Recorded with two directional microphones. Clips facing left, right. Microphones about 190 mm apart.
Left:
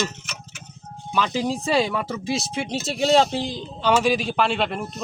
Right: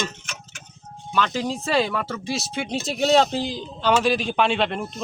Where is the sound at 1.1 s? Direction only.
5° left (ahead or behind).